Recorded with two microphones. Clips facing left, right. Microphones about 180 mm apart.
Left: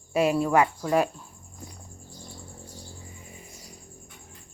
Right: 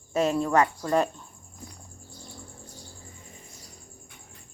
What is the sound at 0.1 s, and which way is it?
Speech, 10° left (ahead or behind).